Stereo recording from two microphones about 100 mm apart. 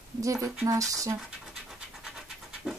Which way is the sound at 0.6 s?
35° right (ahead or behind).